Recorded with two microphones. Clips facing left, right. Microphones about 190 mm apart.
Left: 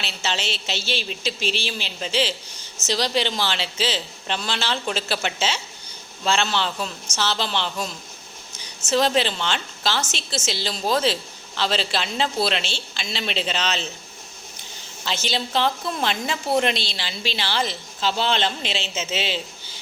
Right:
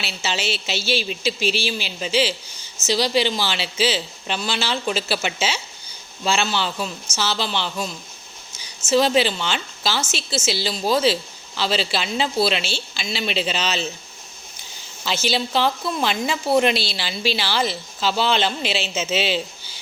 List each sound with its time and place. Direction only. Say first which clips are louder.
0.0 s a woman's voice: right 2 dB; 5° right (ahead or behind)
8.9 s a woman's voice: right 3 dB; 5° right (ahead or behind)
15.0 s a woman's voice: right 4 dB; 5° right (ahead or behind)
18.9 s speech: right 5 dB; 20° left (ahead or behind)